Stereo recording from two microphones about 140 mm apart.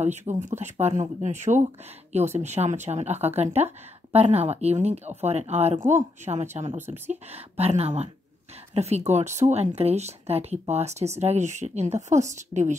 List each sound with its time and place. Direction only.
0.3 s speech: 55° right (ahead or behind)
12.5 s speech: 85° left